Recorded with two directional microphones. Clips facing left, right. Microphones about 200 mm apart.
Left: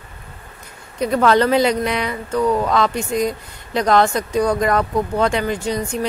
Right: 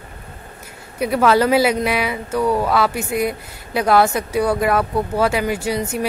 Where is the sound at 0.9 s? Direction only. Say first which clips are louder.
Even; 10° right (ahead or behind).